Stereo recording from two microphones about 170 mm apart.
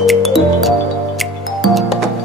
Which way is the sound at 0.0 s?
Centre (ahead or behind).